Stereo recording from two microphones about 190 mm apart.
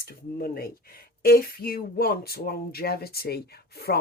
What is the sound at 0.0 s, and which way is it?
Speech, 50° left (ahead or behind).